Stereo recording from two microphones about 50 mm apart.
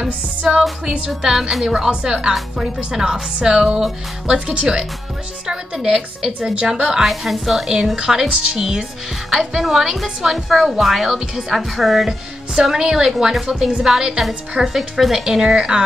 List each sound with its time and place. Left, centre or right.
0.0 s music: right
1.2 s a woman's voice: centre